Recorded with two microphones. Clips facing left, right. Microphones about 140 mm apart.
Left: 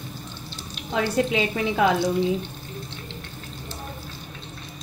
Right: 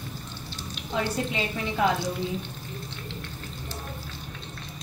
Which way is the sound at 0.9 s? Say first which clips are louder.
Left 6 dB; 90° left.